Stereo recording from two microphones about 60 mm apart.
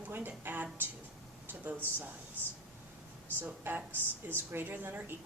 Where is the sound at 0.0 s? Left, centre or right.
Right.